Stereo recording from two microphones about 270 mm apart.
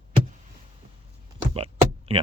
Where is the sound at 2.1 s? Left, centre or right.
Right.